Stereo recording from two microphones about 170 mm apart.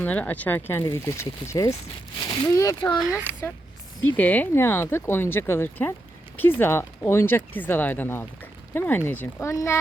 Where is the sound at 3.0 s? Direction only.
5° right (ahead or behind).